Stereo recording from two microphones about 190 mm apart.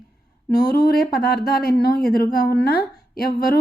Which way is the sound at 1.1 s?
50° left (ahead or behind).